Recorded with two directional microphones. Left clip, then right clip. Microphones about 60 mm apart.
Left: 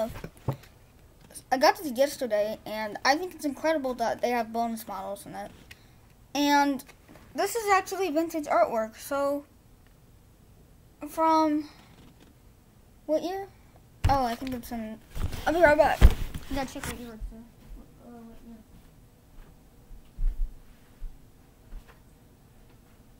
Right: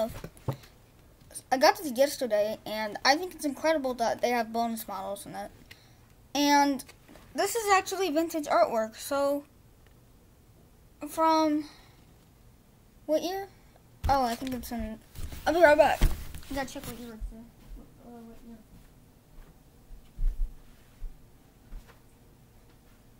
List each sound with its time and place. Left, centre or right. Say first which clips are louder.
0.2 s a sound: left 2 dB; left
1.3 s a woman's voice: even; centre
11.0 s a woman's voice: left 1 dB; centre
13.0 s a child's voice: even; centre
16.5 s a woman's voice: left 2 dB; left